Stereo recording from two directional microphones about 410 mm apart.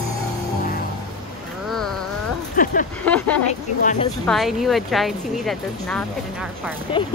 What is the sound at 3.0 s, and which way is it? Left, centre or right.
Speech, centre.